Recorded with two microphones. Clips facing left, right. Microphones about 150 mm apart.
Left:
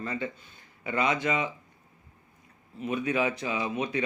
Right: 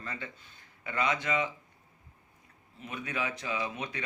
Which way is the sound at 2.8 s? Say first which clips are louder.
Left 9 dB; 15° left (ahead or behind).